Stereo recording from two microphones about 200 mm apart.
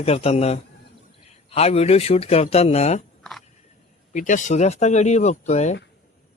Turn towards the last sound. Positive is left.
turn(degrees=35)  # may be behind; listen again after turning